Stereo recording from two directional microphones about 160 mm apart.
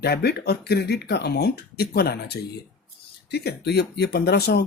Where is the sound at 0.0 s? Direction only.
90° left.